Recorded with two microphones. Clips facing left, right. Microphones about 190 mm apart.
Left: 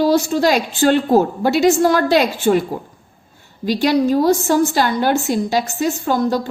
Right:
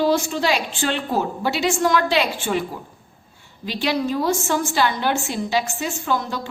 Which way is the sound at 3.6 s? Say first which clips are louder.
Left 7 dB; 45° left (ahead or behind).